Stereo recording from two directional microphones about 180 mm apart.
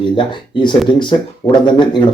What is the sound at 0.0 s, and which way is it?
Speech, 25° left (ahead or behind).